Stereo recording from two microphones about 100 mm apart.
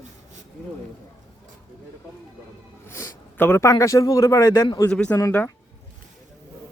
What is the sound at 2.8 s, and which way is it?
A man's voice, 25° left (ahead or behind).